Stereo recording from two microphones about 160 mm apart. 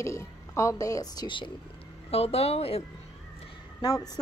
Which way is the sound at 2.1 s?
40° left (ahead or behind).